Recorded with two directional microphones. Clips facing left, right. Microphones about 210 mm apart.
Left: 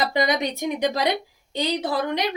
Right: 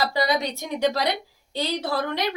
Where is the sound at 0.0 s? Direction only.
20° left (ahead or behind).